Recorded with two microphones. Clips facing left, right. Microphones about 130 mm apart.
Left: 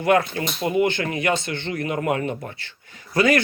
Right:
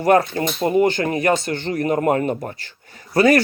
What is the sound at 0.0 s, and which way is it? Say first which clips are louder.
Speech: right 4 dB; 40° right (ahead or behind).